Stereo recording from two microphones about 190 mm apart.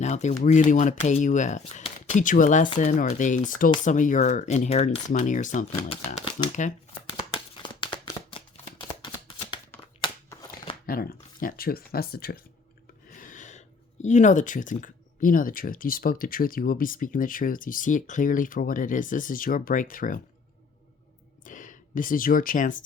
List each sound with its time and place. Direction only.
0.0 s speech: 35° left (ahead or behind)
7.3 s a sound: 25° left (ahead or behind)
8.8 s shuffling cards: 25° left (ahead or behind)
10.8 s speech: 50° left (ahead or behind)
13.1 s speech: 40° left (ahead or behind)
21.4 s speech: 45° left (ahead or behind)